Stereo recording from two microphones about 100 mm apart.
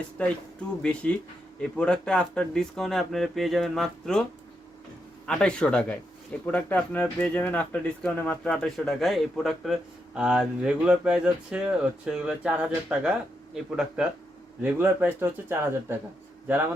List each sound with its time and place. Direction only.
0.2 s speech: 10° left (ahead or behind)
5.2 s speech: 10° left (ahead or behind)
8.5 s speech: 5° left (ahead or behind)
14.6 s speech: 20° right (ahead or behind)